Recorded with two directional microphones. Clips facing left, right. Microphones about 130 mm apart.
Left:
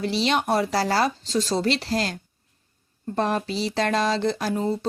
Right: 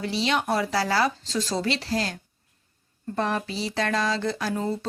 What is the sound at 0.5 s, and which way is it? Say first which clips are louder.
Speech: left 2 dB; 35° left (ahead or behind).